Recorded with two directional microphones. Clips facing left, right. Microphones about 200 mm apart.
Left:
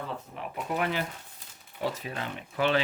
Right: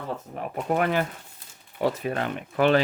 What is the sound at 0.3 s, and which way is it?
Speech, 45° right (ahead or behind).